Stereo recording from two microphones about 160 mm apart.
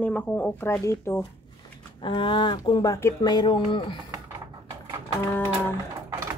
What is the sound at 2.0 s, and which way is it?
Speech, 30° left (ahead or behind).